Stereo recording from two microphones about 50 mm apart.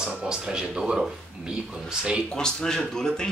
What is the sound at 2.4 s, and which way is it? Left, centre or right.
Speech, centre.